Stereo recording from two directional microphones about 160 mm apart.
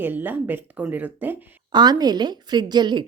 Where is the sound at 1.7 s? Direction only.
25° right (ahead or behind).